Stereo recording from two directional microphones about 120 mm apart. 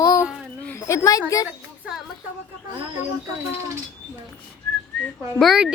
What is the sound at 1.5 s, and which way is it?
Speech, 10° right (ahead or behind).